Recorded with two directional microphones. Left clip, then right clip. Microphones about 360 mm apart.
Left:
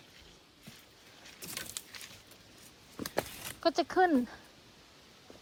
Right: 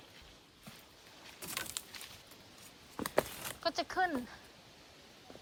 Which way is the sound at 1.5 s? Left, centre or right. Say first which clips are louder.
Right 1 dB; centre.